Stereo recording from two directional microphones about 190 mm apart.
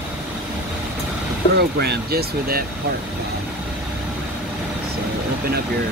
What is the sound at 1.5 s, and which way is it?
Speech, 55° right (ahead or behind).